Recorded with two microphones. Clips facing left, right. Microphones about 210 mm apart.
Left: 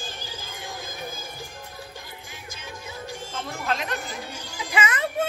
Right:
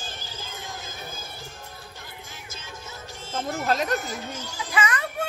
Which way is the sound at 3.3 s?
40° right (ahead or behind).